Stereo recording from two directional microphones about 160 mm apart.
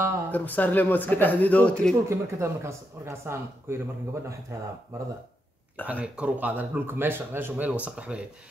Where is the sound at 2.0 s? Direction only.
15° right (ahead or behind).